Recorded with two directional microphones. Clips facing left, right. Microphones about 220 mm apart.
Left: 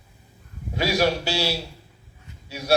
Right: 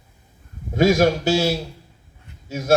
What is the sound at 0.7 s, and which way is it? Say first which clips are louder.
A man's voice: right 6 dB; 45° right (ahead or behind).